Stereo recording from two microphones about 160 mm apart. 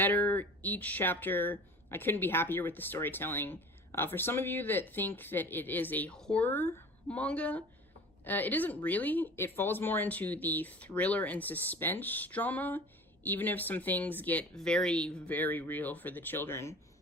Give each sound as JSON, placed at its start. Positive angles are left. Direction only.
{"t": 0.0, "sound": "speech", "side_deg": 10}